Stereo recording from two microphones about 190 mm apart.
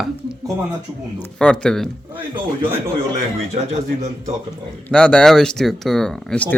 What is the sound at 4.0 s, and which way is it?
Speech, 35° right (ahead or behind).